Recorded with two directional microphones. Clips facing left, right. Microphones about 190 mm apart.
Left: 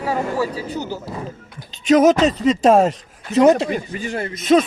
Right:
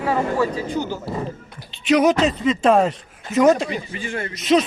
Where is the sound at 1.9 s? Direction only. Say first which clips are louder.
Left 3 dB; 45° left (ahead or behind).